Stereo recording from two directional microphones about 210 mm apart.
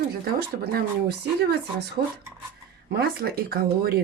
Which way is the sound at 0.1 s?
50° right (ahead or behind).